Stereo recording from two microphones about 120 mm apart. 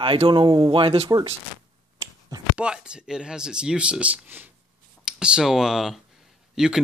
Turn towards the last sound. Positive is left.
turn(degrees=-5)  # may be behind; listen again after turning